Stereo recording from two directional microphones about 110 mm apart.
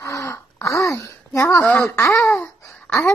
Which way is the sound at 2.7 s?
Centre (ahead or behind).